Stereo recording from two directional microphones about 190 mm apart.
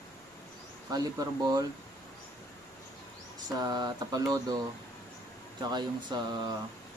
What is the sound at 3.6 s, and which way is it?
Speech, 20° right (ahead or behind).